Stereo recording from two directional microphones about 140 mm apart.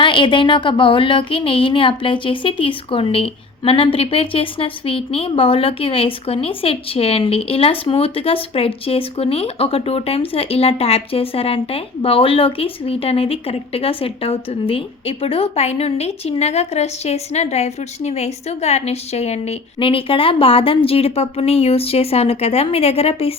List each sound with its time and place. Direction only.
0.0 s speech: 35° left (ahead or behind)